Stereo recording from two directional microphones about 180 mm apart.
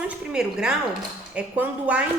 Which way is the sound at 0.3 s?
5° right (ahead or behind).